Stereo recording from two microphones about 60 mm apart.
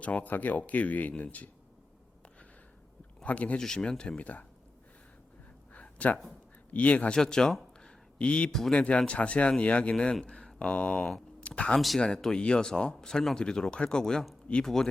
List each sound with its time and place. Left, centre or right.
0.0 s speech: left
3.2 s speech: left
3.6 s speech: centre
4.2 s speech: left
5.7 s a sound: left
6.7 s speech: left
7.2 s speech: centre
7.5 s a sound: centre
8.7 s speech: centre
11.3 s a sound: centre
11.9 s speech: centre